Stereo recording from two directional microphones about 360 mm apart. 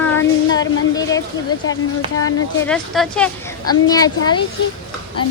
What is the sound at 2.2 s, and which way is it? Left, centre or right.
A woman's voice, centre.